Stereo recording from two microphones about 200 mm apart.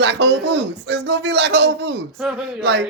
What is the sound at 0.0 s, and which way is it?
Speech, 60° right (ahead or behind).